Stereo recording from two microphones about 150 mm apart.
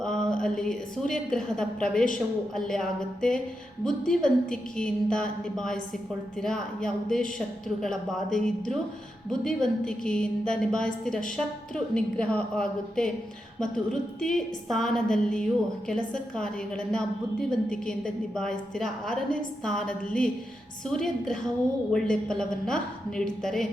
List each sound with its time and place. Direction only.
0.0 s a woman's voice: 5° left (ahead or behind)